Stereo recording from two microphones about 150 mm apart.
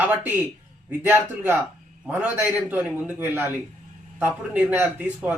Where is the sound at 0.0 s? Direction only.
10° right (ahead or behind).